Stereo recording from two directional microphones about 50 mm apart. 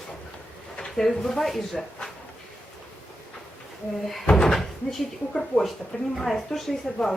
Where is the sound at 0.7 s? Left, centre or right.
Centre.